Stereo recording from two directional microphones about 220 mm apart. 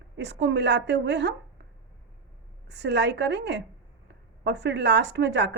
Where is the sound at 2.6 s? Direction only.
50° right (ahead or behind).